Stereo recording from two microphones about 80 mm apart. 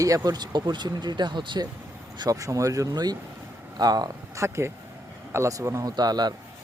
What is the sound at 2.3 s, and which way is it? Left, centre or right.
Speech, right.